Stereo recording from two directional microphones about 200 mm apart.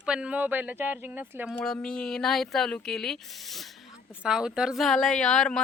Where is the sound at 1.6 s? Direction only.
5° left (ahead or behind).